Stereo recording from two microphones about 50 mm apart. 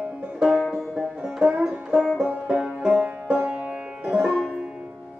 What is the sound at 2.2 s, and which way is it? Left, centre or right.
Banjo, right.